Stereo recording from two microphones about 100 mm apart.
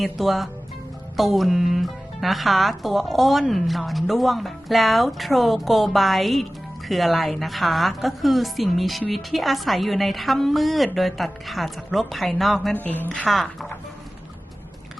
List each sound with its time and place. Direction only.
0.0 s speech: centre (ahead or behind)
12.7 s a woman's voice: 20° left (ahead or behind)
13.1 s speech: centre (ahead or behind)